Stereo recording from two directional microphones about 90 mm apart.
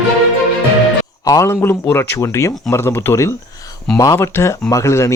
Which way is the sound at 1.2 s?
35° left (ahead or behind).